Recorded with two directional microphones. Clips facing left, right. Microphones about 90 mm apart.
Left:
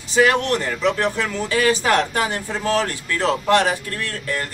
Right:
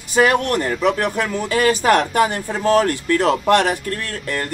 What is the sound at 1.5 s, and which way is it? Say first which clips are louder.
Speech: right 3 dB; 40° right (ahead or behind).